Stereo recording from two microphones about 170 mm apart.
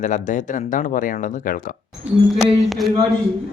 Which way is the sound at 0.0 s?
50° left (ahead or behind).